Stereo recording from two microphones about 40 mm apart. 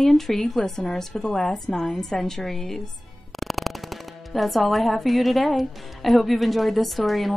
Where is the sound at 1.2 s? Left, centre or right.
Left.